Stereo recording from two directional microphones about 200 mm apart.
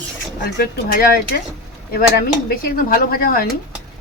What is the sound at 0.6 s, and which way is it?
Speech, 45° left (ahead or behind).